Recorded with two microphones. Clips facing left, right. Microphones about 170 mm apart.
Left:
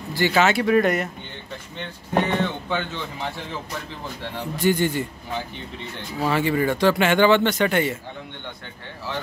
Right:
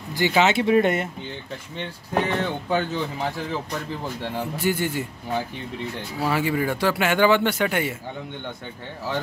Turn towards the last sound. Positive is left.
turn(degrees=-10)  # may be behind; listen again after turning